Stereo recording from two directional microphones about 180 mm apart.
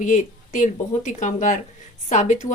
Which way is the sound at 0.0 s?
45° left (ahead or behind).